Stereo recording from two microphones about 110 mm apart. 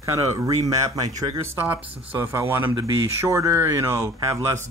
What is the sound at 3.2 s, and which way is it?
Speech, 25° right (ahead or behind).